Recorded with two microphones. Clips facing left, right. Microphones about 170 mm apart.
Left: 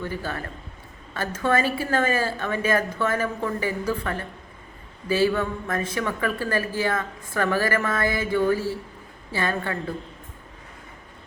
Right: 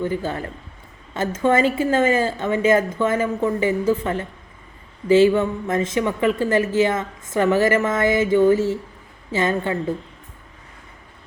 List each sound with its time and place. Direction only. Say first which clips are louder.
0.0 s a woman's voice: right 6 dB; 20° right (ahead or behind)